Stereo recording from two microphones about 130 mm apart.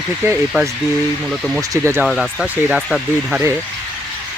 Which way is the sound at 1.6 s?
20° right (ahead or behind).